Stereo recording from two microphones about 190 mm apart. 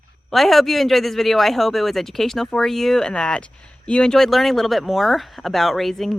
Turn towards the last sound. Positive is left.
turn(degrees=0)  # may be behind; listen again after turning